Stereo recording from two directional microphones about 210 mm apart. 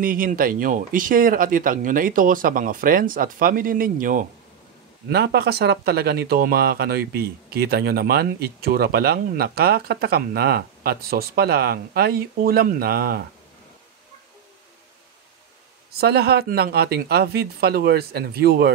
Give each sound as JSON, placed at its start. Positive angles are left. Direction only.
{"t": 0.0, "sound": "speech", "side_deg": -40}
{"t": 5.1, "sound": "speech", "side_deg": -50}
{"t": 16.0, "sound": "speech", "side_deg": -50}